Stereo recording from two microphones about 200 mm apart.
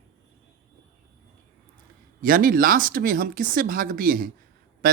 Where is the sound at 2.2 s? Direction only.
45° right (ahead or behind).